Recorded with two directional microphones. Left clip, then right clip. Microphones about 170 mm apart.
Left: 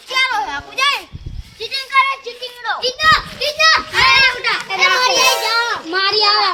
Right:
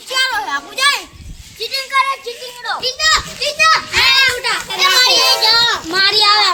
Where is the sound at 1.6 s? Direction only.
10° left (ahead or behind).